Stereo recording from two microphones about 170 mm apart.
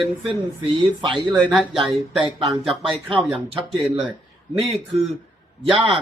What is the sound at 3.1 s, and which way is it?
Speech, 30° right (ahead or behind).